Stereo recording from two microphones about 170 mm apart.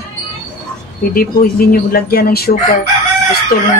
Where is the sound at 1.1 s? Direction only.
60° left (ahead or behind).